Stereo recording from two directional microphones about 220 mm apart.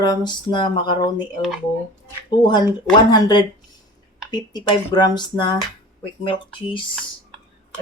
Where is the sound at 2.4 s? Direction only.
20° left (ahead or behind).